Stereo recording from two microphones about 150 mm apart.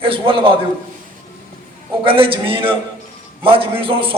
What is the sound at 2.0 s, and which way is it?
A man's voice, 35° right (ahead or behind).